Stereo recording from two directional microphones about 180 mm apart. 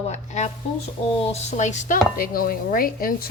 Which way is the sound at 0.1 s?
40° left (ahead or behind).